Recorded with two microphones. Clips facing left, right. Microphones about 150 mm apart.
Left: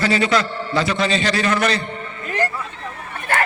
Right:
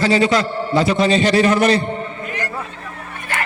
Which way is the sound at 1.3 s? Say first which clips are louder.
Right 5 dB; 25° right (ahead or behind).